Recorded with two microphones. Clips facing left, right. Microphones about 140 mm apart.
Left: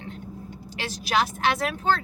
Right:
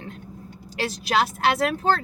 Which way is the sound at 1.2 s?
35° right (ahead or behind).